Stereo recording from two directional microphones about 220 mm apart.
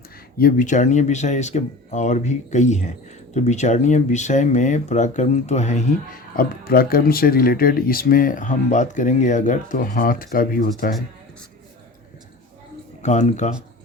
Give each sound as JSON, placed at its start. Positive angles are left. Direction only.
{"t": 0.3, "sound": "speech", "side_deg": 40}
{"t": 6.3, "sound": "speech", "side_deg": 45}
{"t": 13.0, "sound": "speech", "side_deg": 30}